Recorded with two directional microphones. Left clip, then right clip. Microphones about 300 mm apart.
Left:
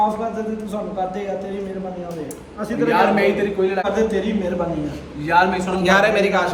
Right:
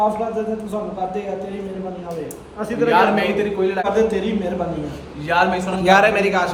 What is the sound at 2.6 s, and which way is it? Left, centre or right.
A man's voice, centre.